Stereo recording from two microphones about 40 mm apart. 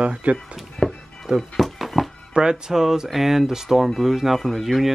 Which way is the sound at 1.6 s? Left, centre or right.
Centre.